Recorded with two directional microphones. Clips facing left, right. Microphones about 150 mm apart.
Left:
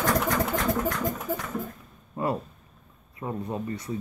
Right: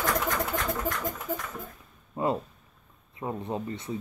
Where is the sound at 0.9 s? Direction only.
Centre (ahead or behind).